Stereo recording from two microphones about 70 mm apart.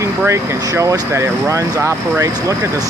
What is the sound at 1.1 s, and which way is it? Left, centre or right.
Speech, right.